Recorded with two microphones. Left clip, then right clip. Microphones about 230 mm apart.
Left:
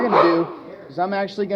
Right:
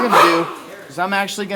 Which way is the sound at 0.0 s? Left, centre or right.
Right.